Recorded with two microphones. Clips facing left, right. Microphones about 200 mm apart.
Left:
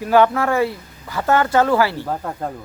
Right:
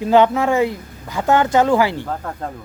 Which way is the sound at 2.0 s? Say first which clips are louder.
Left 1 dB; 10° left (ahead or behind).